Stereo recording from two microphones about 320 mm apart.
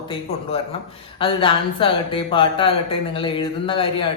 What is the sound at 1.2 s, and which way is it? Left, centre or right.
Speech, centre.